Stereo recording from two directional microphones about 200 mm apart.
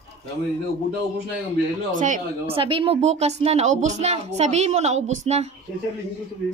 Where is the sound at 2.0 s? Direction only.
40° right (ahead or behind).